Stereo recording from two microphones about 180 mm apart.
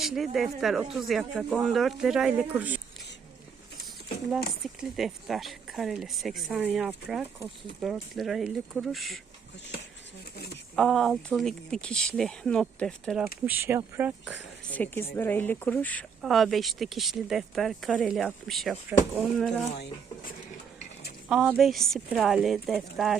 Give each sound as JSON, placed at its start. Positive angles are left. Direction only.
{"t": 0.0, "sound": "speech", "side_deg": 0}
{"t": 4.8, "sound": "speech", "side_deg": 0}
{"t": 10.3, "sound": "a sound", "side_deg": 60}
{"t": 10.8, "sound": "speech", "side_deg": 0}
{"t": 14.7, "sound": "speech", "side_deg": 10}
{"t": 21.2, "sound": "speech", "side_deg": -5}